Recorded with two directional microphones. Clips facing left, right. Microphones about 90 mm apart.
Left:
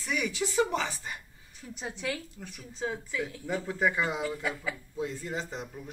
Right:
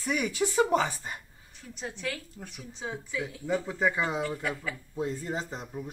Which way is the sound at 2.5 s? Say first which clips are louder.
Left 3 dB; 15° right (ahead or behind).